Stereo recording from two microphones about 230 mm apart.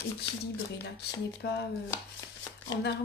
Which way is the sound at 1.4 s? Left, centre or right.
Left.